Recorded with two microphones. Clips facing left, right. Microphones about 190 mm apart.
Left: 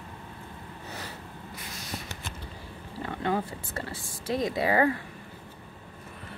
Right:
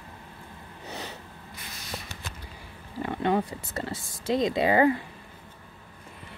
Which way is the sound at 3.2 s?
20° right (ahead or behind).